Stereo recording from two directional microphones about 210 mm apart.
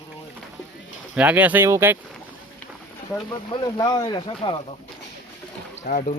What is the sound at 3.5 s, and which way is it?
Speech, 20° left (ahead or behind).